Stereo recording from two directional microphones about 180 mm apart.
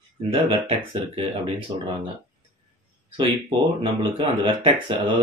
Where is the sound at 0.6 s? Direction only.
30° right (ahead or behind).